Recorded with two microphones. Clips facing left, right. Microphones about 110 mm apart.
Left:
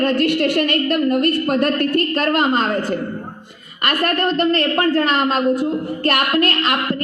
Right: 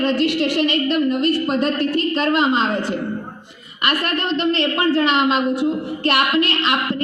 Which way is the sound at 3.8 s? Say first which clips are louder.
Left 2 dB; 45° left (ahead or behind).